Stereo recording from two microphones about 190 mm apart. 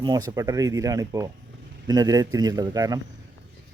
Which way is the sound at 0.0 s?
20° right (ahead or behind).